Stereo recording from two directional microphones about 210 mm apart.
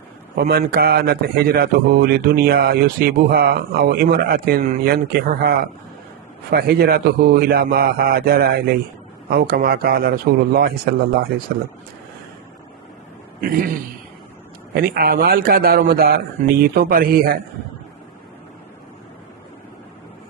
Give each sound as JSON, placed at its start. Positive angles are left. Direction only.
{"t": 0.3, "sound": "speech", "side_deg": -50}
{"t": 13.4, "sound": "speech", "side_deg": -45}
{"t": 14.7, "sound": "speech", "side_deg": -45}